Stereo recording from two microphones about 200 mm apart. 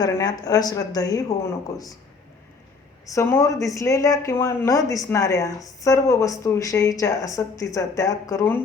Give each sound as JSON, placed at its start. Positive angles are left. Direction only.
{"t": 0.0, "sound": "speech", "side_deg": 20}
{"t": 3.1, "sound": "speech", "side_deg": 15}